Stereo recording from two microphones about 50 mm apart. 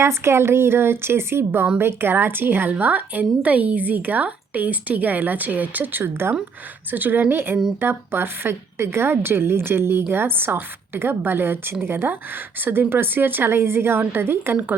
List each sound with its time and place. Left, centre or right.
0.0 s a woman's voice: right